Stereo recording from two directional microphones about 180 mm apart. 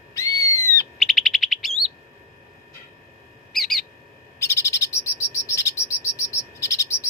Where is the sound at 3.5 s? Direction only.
Centre (ahead or behind).